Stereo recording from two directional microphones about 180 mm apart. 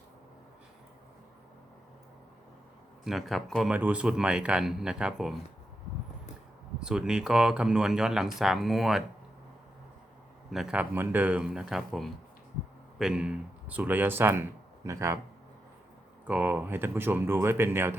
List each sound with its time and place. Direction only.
3.0 s speech: centre (ahead or behind)
6.7 s speech: 5° right (ahead or behind)
10.5 s speech: 5° right (ahead or behind)
16.2 s speech: 10° right (ahead or behind)